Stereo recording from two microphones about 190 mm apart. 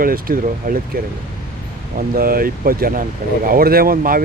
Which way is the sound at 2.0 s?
50° right (ahead or behind).